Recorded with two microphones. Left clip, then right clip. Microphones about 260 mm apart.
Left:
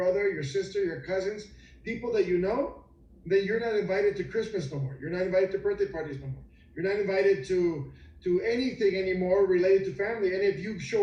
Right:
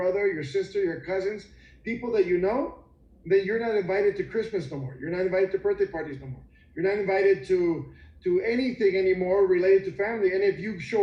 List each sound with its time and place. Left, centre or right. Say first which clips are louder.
0.0 s a man's voice: right 1 dB; right